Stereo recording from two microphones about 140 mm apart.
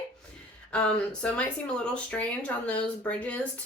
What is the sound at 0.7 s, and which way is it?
Speech, 10° left (ahead or behind).